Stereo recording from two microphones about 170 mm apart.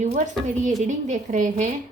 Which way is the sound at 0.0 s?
45° right (ahead or behind).